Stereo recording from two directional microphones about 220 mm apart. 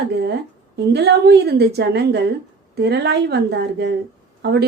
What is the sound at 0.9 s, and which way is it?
A woman's voice, 50° right (ahead or behind).